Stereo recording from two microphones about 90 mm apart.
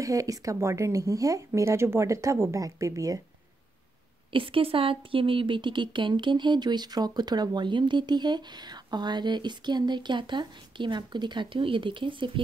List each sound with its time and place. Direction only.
0.0 s speech: 40° right (ahead or behind)
4.3 s speech: 80° right